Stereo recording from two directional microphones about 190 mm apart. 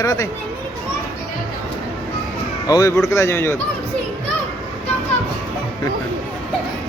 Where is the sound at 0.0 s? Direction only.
15° left (ahead or behind).